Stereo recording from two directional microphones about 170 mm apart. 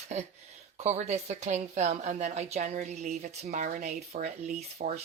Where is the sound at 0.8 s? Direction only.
40° right (ahead or behind).